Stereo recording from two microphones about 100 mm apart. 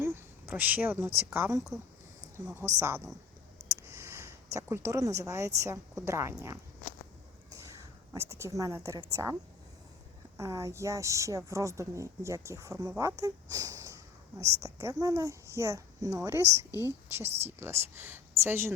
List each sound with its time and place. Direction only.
0.0 s speech: 20° right (ahead or behind)
2.6 s a woman's voice: 25° right (ahead or behind)
10.3 s a woman's voice: 30° right (ahead or behind)
17.2 s speech: 90° right
17.6 s a woman's voice: 25° right (ahead or behind)